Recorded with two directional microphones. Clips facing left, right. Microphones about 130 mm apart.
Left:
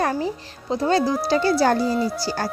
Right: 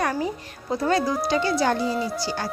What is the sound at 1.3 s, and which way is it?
Speech, 35° left (ahead or behind).